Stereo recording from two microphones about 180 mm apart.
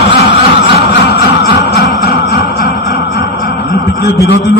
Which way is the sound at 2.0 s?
60° left (ahead or behind).